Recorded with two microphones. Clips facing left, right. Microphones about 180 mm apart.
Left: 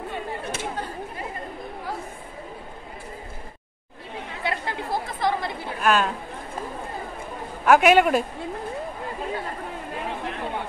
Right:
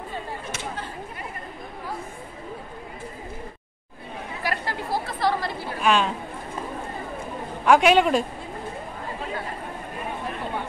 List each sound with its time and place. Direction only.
4.4 s chatter: 20° left (ahead or behind)
5.8 s speech: centre (ahead or behind)
7.6 s a man's voice: 5° left (ahead or behind)